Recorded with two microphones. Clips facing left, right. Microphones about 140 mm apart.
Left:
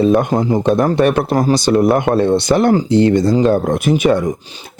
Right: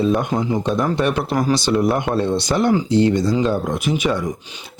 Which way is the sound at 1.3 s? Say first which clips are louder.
Left 5 dB; 40° left (ahead or behind).